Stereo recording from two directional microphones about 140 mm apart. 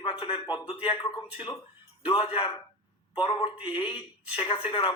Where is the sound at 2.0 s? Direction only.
40° left (ahead or behind).